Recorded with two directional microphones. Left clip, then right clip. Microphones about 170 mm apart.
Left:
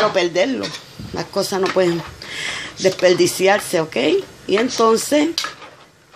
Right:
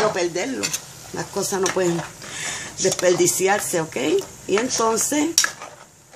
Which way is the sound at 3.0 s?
10° left (ahead or behind).